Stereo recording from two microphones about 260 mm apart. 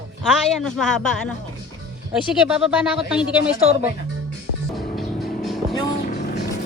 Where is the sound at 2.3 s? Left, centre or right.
Centre.